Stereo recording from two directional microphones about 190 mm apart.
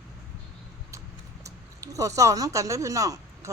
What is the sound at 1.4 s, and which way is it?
Speech, 15° right (ahead or behind).